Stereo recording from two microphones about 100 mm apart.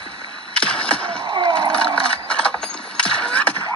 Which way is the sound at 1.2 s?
50° right (ahead or behind).